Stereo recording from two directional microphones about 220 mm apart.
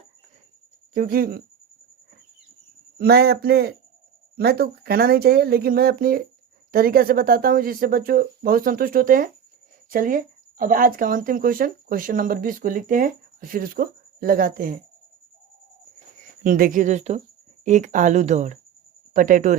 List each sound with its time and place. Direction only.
0.9 s speech: 40° right (ahead or behind)
3.0 s speech: 45° right (ahead or behind)
16.4 s speech: 40° right (ahead or behind)